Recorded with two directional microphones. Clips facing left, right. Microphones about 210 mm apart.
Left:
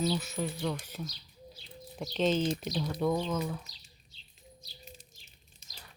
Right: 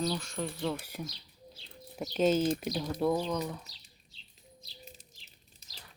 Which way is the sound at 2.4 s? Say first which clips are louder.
Right 2 dB; 50° right (ahead or behind).